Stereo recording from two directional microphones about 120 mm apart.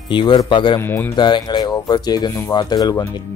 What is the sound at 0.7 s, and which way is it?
Speech, 20° left (ahead or behind).